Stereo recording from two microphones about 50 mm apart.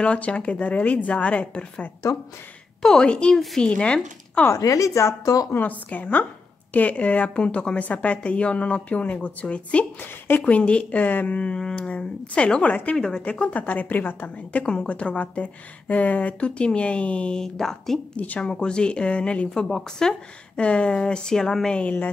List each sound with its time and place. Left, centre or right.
0.0 s a woman's voice: left
2.8 s a woman's voice: centre
4.5 s speech: left
5.6 s a woman's voice: left
9.9 s a woman's voice: left
10.4 s a woman's voice: left
11.3 s a woman's voice: left
13.2 s a woman's voice: left
17.4 s speech: centre
18.1 s a woman's voice: left
18.4 s a woman's voice: centre
19.5 s speech: centre